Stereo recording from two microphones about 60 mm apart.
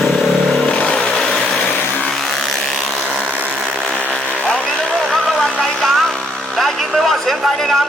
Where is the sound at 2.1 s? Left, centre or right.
Centre.